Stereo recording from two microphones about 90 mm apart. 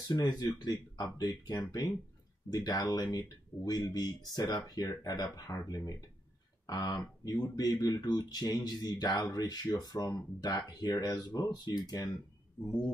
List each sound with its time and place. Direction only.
0.1 s speech: 50° left (ahead or behind)